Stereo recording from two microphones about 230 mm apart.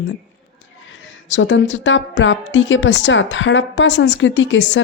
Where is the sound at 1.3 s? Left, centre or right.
Left.